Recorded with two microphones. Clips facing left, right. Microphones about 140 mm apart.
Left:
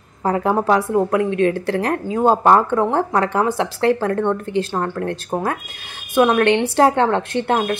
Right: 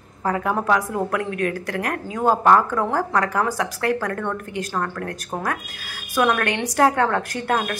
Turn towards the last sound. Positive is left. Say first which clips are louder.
# left 4 dB
turn(degrees=25)  # may be behind; listen again after turning